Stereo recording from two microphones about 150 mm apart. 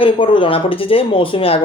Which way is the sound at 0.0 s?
35° left (ahead or behind).